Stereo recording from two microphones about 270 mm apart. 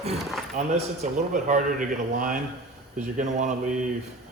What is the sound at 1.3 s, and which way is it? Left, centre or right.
A man's voice, right.